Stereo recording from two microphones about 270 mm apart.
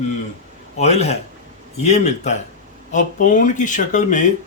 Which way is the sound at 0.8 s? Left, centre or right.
Left.